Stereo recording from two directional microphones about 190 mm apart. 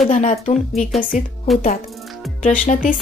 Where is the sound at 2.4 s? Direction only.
40° left (ahead or behind).